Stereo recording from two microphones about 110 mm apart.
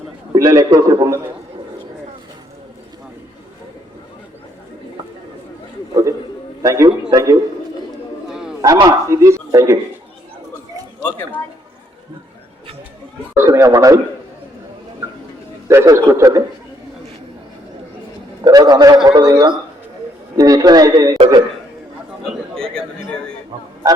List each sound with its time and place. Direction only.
0.3 s a man's voice: 30° right (ahead or behind)
5.9 s a sound: 30° right (ahead or behind)
6.6 s a man's voice: 30° right (ahead or behind)
8.3 s a sound: 5° right (ahead or behind)
8.6 s speech: 30° right (ahead or behind)
13.3 s speech: 25° right (ahead or behind)
15.7 s speech: 25° right (ahead or behind)
18.4 s a man's voice: 35° right (ahead or behind)
22.7 s a sound: 5° left (ahead or behind)